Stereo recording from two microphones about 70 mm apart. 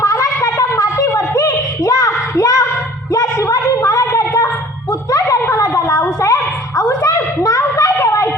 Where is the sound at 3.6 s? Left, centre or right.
Left.